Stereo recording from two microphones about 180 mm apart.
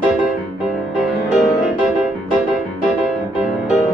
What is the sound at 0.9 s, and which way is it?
Music, centre (ahead or behind).